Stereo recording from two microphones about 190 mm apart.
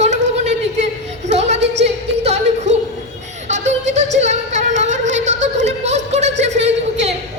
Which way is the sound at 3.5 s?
40° right (ahead or behind).